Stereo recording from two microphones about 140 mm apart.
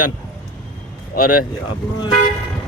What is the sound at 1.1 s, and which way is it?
Speech, 90° left.